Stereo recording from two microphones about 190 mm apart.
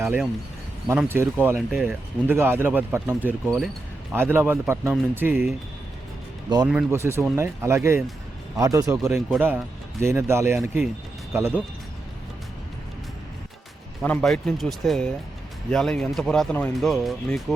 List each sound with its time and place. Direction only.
0.9 s speech: 10° right (ahead or behind)
1.5 s speech: centre (ahead or behind)
2.3 s speech: 10° right (ahead or behind)
6.7 s speech: 10° right (ahead or behind)
14.0 s speech: 5° left (ahead or behind)